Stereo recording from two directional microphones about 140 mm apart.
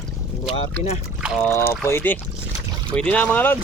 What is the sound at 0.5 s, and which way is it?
Speech, 45° left (ahead or behind).